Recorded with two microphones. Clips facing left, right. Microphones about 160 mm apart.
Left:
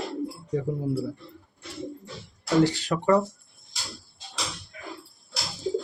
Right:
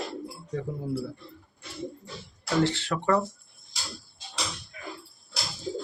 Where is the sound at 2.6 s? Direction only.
15° left (ahead or behind).